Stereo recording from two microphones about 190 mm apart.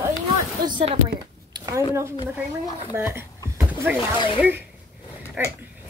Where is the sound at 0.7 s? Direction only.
25° right (ahead or behind).